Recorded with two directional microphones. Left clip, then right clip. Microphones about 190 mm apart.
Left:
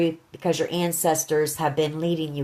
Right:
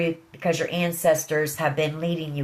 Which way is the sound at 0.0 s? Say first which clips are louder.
Left 1 dB; 50° left (ahead or behind).